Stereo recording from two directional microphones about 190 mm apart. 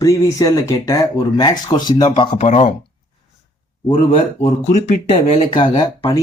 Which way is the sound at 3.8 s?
30° left (ahead or behind).